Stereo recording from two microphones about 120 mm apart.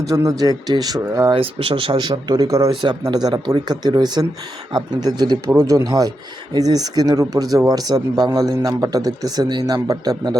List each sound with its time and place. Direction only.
0.0 s speech: 30° right (ahead or behind)
1.3 s speech: 45° right (ahead or behind)